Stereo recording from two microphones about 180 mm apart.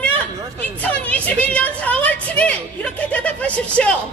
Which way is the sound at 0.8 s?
10° left (ahead or behind).